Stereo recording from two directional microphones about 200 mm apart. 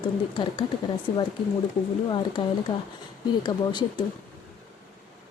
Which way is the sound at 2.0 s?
25° left (ahead or behind).